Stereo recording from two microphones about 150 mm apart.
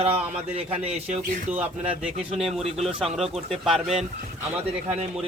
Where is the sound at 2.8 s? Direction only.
Centre (ahead or behind).